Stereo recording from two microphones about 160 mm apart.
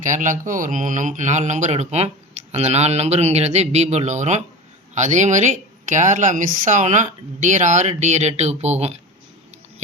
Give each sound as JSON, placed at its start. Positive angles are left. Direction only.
{"t": 0.0, "sound": "speech", "side_deg": -55}